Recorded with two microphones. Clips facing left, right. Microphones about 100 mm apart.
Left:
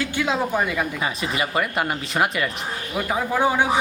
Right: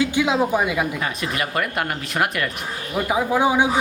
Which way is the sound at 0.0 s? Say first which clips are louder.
Right 4 dB; 15° right (ahead or behind).